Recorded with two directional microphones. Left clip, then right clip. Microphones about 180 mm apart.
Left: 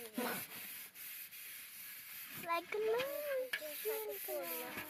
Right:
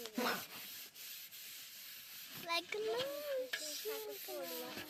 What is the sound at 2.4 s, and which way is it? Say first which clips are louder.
Speech: left 2 dB; 25° left (ahead or behind).